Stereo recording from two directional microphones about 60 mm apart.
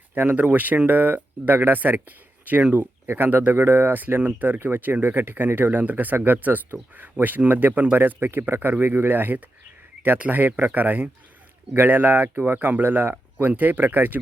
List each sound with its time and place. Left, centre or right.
0.1 s speech: right